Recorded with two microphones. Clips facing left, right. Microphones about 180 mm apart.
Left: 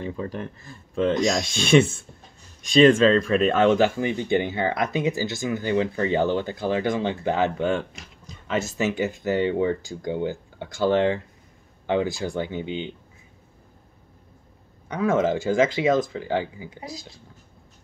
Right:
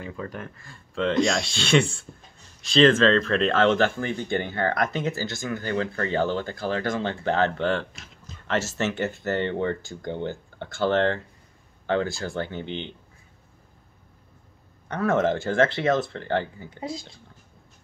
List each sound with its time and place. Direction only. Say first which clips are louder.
0.0 s speech: left 4 dB; 25° left (ahead or behind); by 7.8 s 10° left (ahead or behind)
8.9 s speech: left 3 dB; 5° left (ahead or behind)
14.9 s speech: left 1 dB; 10° left (ahead or behind)
16.8 s speech: right 7 dB; 25° right (ahead or behind)